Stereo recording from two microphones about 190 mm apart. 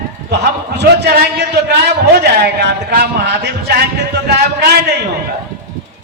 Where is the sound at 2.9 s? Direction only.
60° right (ahead or behind).